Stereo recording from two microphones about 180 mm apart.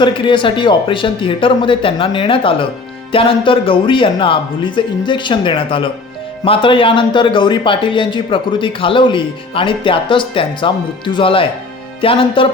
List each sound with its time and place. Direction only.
0.0 s speech: 30° left (ahead or behind)